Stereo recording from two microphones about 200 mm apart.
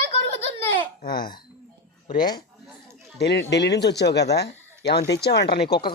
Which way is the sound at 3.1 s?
55° left (ahead or behind).